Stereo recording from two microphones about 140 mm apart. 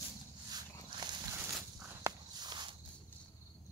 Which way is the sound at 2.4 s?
30° right (ahead or behind).